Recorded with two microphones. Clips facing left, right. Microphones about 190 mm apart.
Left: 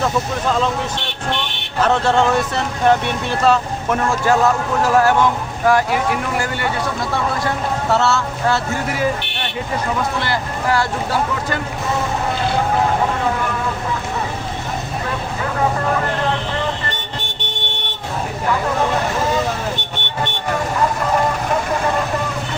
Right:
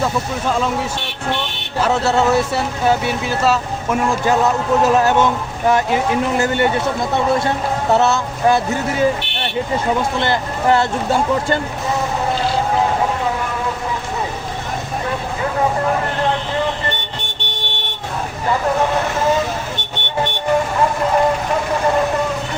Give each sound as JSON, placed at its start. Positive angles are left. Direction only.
{"t": 1.8, "sound": "speech", "side_deg": -5}
{"t": 10.2, "sound": "speech", "side_deg": -25}